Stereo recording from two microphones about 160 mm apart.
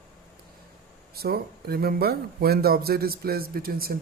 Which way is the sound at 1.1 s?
75° right (ahead or behind).